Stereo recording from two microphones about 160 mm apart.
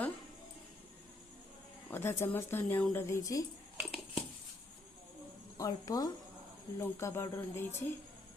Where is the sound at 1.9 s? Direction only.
15° left (ahead or behind).